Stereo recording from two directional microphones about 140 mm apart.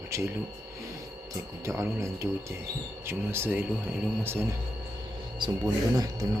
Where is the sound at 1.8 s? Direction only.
20° right (ahead or behind).